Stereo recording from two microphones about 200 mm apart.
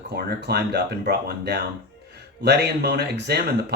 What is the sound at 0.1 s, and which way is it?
Speech, 55° right (ahead or behind).